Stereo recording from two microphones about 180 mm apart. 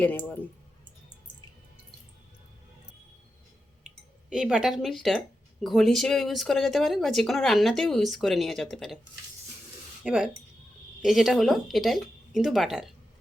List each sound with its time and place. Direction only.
0.0 s speech: 10° left (ahead or behind)
4.3 s speech: 5° right (ahead or behind)
10.0 s speech: centre (ahead or behind)